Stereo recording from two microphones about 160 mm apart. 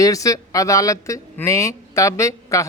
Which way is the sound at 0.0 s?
20° left (ahead or behind).